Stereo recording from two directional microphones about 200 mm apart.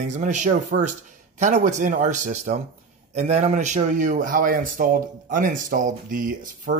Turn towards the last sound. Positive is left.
turn(degrees=-40)  # may be behind; listen again after turning